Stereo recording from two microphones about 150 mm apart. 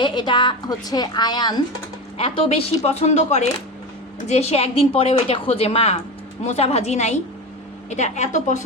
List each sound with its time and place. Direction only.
0.0 s a woman's voice: 30° left (ahead or behind)
2.1 s a woman's voice: 40° left (ahead or behind); by 8.6 s 55° left (ahead or behind)